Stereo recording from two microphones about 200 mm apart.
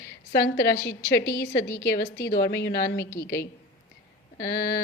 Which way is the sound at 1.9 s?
50° left (ahead or behind).